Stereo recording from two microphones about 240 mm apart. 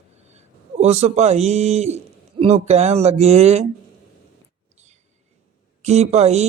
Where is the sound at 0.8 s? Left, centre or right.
Right.